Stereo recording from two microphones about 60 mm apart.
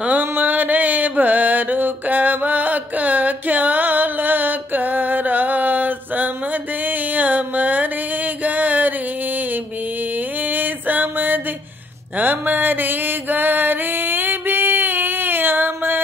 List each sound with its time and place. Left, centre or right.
0.2 s mantra: right
10.1 s music: right
12.2 s mantra: right